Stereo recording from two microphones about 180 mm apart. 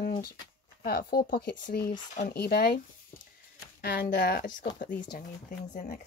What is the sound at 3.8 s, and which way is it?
A woman's voice, 65° left (ahead or behind).